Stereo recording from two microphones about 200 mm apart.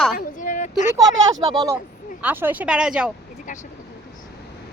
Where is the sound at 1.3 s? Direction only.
15° right (ahead or behind).